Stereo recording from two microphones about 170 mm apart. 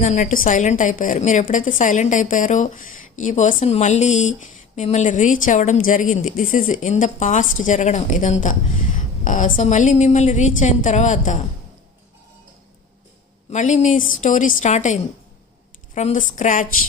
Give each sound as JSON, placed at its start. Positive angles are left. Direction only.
{"t": 0.0, "sound": "a woman's voice", "side_deg": 45}
{"t": 13.5, "sound": "a woman's voice", "side_deg": 45}
{"t": 16.0, "sound": "a woman's voice", "side_deg": 45}